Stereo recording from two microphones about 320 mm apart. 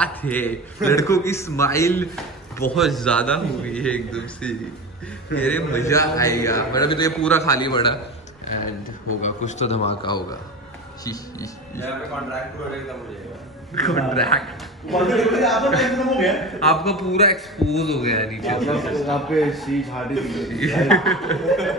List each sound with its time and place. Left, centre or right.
0.0 s a man's voice: centre
9.2 s a man's voice: left
13.8 s a man's voice: centre